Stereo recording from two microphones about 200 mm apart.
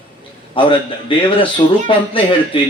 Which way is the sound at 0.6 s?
25° left (ahead or behind).